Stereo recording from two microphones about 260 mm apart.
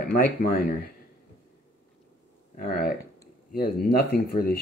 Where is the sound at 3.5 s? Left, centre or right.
Left.